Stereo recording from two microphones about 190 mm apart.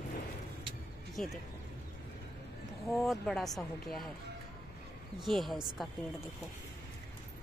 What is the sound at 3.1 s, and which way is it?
Speech, centre (ahead or behind).